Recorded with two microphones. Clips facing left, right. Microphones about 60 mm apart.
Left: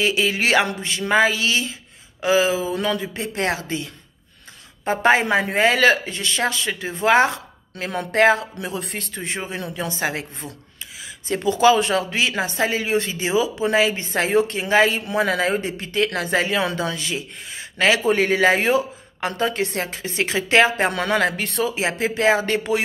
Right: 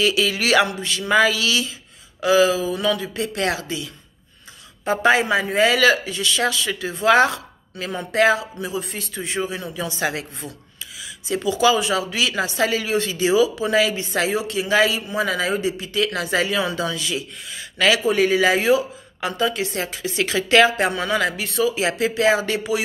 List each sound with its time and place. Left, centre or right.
0.0 s speech: left
7.7 s speech: left
8.5 s speech: left
9.2 s speech: left
20.9 s speech: left
21.7 s speech: left